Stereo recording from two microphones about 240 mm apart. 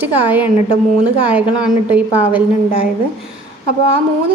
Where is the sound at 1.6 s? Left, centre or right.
Centre.